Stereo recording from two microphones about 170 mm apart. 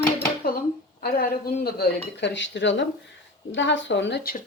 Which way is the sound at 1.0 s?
65° left (ahead or behind).